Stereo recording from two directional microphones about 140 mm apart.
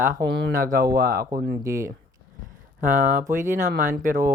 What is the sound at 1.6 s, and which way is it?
Speech, 20° right (ahead or behind).